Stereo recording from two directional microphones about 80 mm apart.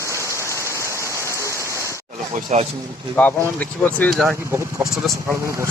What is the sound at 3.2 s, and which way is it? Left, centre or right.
Speech, left.